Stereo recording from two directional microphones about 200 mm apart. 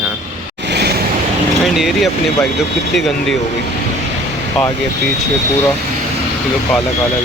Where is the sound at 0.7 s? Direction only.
55° right (ahead or behind).